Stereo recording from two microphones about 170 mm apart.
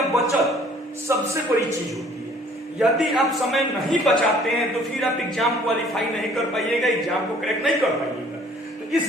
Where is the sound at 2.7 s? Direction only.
Centre (ahead or behind).